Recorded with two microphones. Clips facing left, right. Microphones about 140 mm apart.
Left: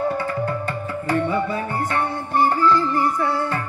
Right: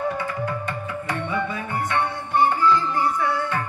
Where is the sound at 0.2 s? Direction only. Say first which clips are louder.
Left 3 dB; 35° left (ahead or behind).